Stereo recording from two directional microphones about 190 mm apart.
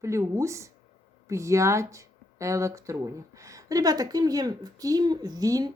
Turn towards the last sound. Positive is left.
turn(degrees=-20)  # may be behind; listen again after turning